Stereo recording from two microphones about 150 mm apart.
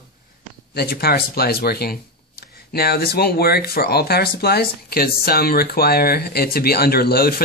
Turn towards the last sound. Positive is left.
turn(degrees=90)